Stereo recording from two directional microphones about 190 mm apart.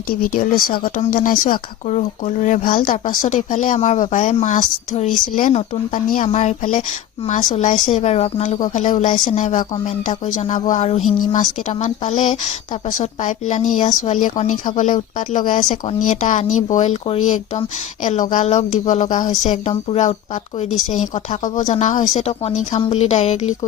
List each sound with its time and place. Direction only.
0.1 s a woman's voice: 50° left (ahead or behind)
21.4 s a woman's voice: 40° left (ahead or behind)